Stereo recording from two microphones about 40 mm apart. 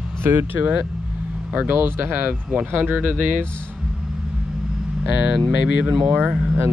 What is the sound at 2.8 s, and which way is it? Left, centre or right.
Speech, right.